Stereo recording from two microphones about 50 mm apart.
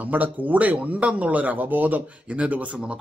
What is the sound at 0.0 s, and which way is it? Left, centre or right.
A man's voice, right.